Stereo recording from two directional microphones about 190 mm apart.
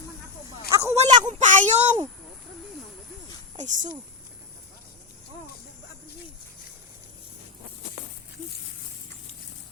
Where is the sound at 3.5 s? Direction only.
40° right (ahead or behind).